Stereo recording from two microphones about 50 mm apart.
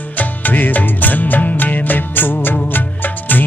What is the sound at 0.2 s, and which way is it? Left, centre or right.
Music, left.